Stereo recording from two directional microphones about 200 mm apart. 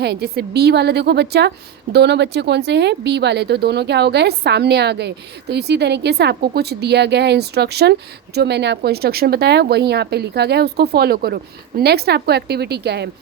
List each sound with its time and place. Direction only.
0.0 s a woman's voice: 55° right (ahead or behind)